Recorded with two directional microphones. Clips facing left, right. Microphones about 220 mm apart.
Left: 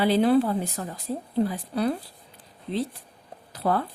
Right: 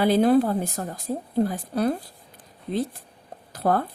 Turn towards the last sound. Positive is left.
turn(degrees=-45)  # may be behind; listen again after turning